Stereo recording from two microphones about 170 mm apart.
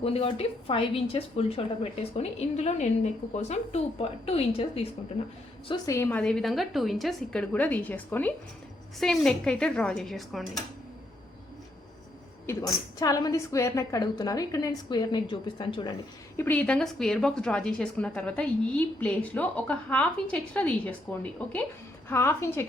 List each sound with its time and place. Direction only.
0.0 s a woman's voice: 35° left (ahead or behind)
5.6 s a woman's voice: 20° left (ahead or behind); by 10.6 s centre (ahead or behind)
12.5 s a woman's voice: 20° left (ahead or behind)
16.4 s a woman's voice: 10° left (ahead or behind)